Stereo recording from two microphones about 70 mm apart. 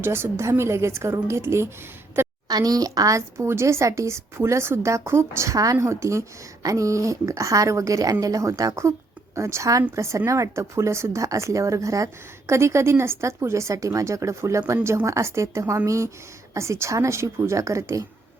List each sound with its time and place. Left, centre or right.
0.0 s a woman's voice: right
2.2 s a sound: right
2.5 s speech: right